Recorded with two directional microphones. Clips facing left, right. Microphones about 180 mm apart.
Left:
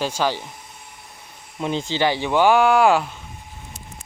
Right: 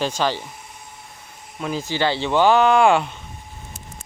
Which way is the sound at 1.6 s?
25° left (ahead or behind).